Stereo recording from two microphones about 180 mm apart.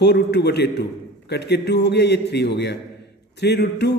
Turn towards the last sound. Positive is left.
turn(degrees=70)  # may be behind; listen again after turning